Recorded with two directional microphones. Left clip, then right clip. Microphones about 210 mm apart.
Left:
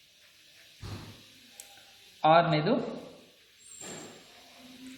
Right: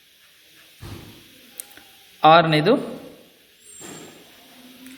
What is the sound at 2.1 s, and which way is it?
Speech, 40° right (ahead or behind).